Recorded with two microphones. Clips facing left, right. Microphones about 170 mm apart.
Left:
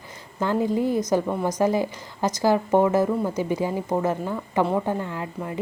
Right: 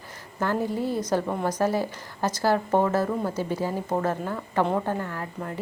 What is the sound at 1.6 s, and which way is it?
Speech, 15° left (ahead or behind).